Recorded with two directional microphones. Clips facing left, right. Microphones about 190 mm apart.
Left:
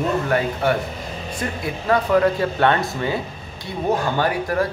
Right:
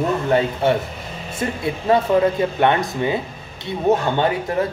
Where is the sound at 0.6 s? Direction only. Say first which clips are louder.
Right 2 dB; 25° right (ahead or behind).